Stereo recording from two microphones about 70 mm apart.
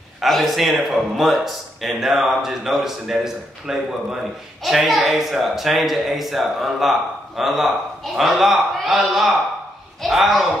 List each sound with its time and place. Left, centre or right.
0.2 s a man's voice: centre